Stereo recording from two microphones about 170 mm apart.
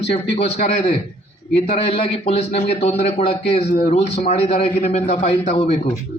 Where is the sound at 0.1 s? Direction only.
40° left (ahead or behind).